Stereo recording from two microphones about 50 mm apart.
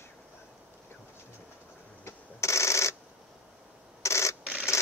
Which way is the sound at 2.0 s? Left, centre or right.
Left.